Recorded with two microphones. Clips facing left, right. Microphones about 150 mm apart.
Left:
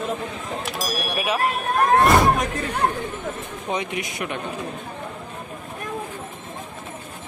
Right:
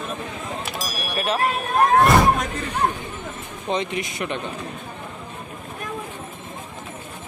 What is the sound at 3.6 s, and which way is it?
Speech, 10° left (ahead or behind).